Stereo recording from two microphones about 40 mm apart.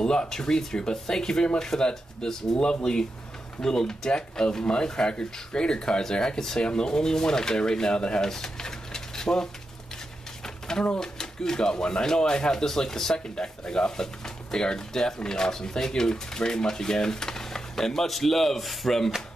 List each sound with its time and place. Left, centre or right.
0.0 s speech: centre
10.4 s a sound: centre
11.0 s speech: centre